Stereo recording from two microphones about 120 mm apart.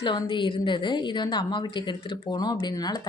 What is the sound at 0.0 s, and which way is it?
Speech, 40° left (ahead or behind).